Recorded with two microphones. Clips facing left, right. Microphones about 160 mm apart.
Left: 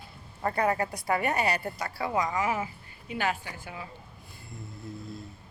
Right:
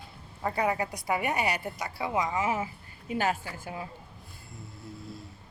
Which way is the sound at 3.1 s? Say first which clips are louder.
Right 2 dB; 40° right (ahead or behind).